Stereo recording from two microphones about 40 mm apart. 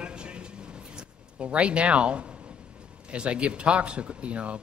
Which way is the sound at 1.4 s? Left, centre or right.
Right.